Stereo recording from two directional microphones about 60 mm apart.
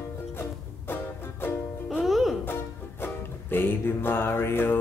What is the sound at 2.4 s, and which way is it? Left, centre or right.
Music, left.